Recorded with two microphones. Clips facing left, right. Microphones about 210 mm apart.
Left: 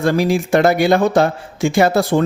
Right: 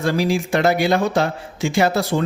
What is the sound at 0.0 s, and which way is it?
Speech, 50° left (ahead or behind).